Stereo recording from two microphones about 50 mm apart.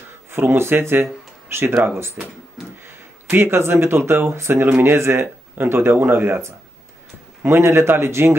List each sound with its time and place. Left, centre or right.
0.3 s speech: right
2.2 s speech: centre
2.6 s a sound: centre
3.3 s speech: right
7.4 s speech: right